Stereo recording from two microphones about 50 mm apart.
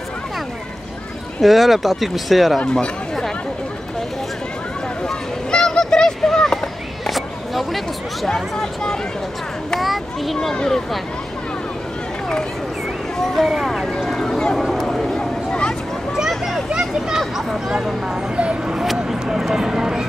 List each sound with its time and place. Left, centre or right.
1.4 s speech: centre
2.6 s speech: centre
5.0 s a sound: centre
7.1 s a sound: centre
9.8 s children playing: centre
10.5 s speech: centre
13.2 s speech: centre
13.9 s a sound: centre
16.2 s a sound: centre
17.1 s speech: centre
18.3 s speech: right
18.8 s speech: centre